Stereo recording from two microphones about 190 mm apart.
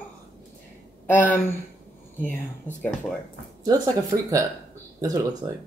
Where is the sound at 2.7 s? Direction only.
10° left (ahead or behind).